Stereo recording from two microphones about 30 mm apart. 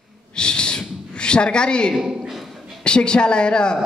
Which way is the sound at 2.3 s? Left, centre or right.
Centre.